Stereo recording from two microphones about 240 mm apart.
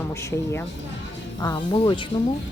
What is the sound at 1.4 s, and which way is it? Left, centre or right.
Speech, centre.